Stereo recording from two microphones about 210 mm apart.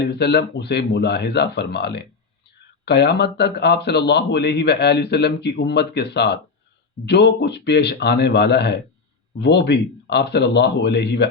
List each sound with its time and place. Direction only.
0.0 s a man's voice: 50° left (ahead or behind)